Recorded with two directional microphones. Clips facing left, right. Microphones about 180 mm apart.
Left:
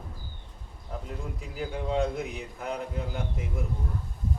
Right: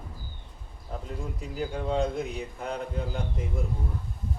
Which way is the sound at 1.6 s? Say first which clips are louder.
Right 1 dB; centre (ahead or behind).